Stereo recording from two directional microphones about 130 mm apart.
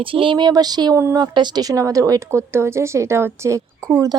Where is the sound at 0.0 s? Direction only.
40° right (ahead or behind).